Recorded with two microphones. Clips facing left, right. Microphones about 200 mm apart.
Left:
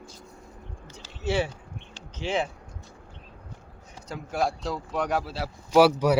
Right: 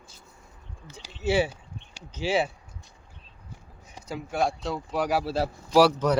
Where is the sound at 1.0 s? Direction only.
5° right (ahead or behind).